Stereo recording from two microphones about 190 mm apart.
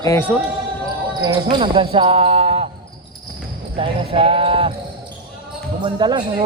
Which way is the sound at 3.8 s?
30° right (ahead or behind).